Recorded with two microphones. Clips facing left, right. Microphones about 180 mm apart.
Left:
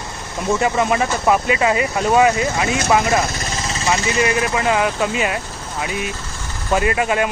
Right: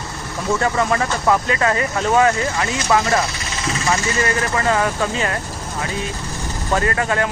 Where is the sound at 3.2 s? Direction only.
45° left (ahead or behind).